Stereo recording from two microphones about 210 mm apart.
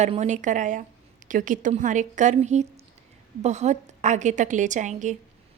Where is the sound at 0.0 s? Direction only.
35° right (ahead or behind).